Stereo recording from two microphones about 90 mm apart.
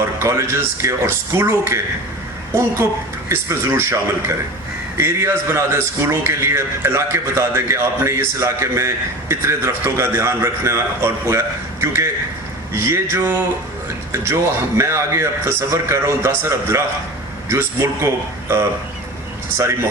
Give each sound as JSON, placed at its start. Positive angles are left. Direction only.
{"t": 0.0, "sound": "a man's voice", "side_deg": -30}
{"t": 3.2, "sound": "a man's voice", "side_deg": -30}